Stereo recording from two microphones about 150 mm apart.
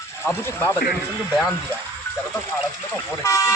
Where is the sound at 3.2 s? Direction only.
20° left (ahead or behind).